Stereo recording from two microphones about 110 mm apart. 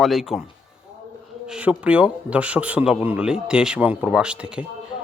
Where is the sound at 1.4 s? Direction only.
10° right (ahead or behind).